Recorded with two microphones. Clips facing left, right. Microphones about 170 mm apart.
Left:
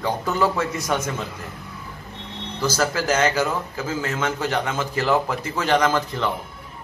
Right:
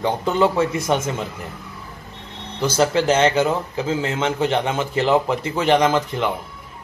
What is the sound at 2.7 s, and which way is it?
A man's voice, 25° right (ahead or behind).